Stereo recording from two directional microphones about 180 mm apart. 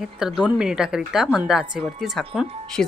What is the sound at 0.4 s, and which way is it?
A woman's voice, 5° right (ahead or behind).